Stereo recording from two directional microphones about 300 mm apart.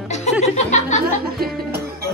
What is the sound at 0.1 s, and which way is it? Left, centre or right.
Speech, left.